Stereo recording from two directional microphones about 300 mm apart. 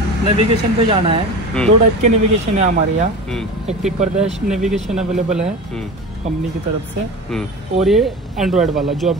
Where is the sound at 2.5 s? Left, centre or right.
Right.